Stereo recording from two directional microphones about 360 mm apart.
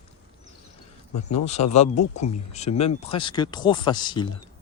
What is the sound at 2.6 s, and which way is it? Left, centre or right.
Speech, centre.